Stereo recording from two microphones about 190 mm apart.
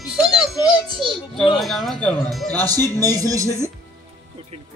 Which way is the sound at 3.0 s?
20° right (ahead or behind).